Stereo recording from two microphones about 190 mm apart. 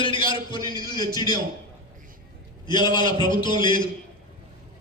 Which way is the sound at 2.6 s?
25° left (ahead or behind).